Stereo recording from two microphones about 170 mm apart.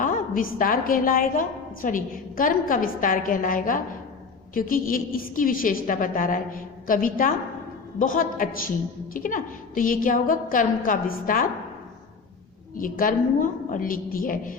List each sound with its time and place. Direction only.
0.0 s a woman's voice: 55° left (ahead or behind)
12.7 s a woman's voice: 55° left (ahead or behind)